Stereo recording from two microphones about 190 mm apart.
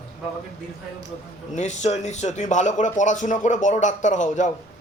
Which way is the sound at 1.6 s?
35° left (ahead or behind).